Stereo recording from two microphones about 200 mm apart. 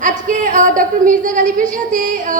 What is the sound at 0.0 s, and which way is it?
A woman's voice, 40° right (ahead or behind).